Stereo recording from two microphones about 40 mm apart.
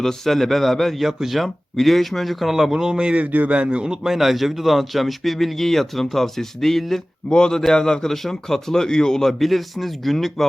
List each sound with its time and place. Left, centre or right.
0.0 s speech: centre
0.9 s speech: centre
3.5 s speech: right
4.0 s speech: centre
7.3 s speech: centre
9.4 s speech: centre